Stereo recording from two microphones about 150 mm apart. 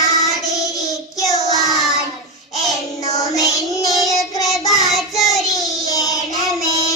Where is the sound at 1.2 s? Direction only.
25° left (ahead or behind).